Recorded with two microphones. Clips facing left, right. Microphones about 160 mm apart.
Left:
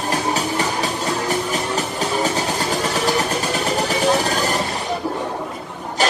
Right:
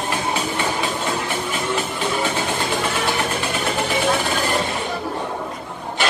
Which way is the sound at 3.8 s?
40° left (ahead or behind).